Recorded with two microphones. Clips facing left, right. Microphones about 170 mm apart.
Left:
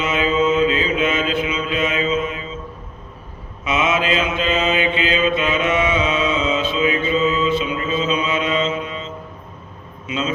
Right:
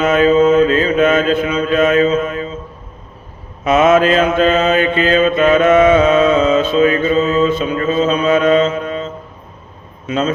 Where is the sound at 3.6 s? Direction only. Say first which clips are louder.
Right 9 dB; 50° right (ahead or behind).